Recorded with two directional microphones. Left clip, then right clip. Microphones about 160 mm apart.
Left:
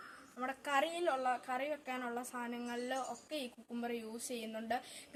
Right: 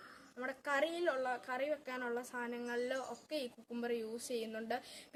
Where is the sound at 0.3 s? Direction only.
20° right (ahead or behind).